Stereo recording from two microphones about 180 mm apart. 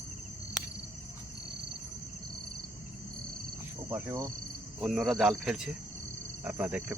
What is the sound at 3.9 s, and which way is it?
Speech, 15° right (ahead or behind).